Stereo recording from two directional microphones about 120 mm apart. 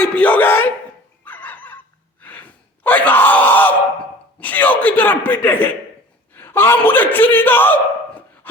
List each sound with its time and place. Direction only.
0.0 s a man's voice: 10° left (ahead or behind)
1.2 s fowl: 15° left (ahead or behind)
2.2 s gasp: 15° left (ahead or behind)
4.4 s a man's voice: 15° left (ahead or behind)